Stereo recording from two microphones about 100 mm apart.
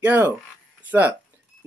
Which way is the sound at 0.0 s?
15° right (ahead or behind).